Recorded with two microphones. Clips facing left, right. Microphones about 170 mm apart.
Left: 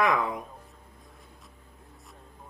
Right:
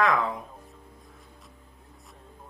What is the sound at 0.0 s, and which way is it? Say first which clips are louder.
Speech: right 1 dB; 15° left (ahead or behind).